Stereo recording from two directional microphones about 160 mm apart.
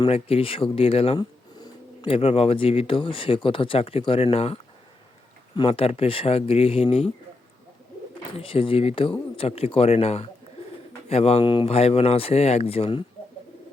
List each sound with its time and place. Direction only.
0.0 s speech: 35° left (ahead or behind)
5.5 s speech: 35° left (ahead or behind)
8.4 s speech: 35° left (ahead or behind)